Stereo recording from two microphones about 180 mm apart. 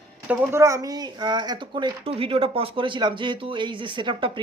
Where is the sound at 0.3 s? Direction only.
15° right (ahead or behind).